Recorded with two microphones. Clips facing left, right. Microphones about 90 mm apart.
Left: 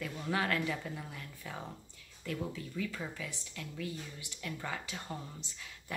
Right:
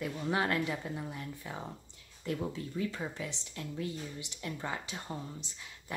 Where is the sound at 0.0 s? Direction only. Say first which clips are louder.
Right 2 dB; 25° right (ahead or behind).